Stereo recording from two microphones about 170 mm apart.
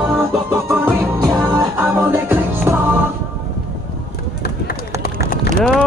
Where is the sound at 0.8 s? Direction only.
10° right (ahead or behind).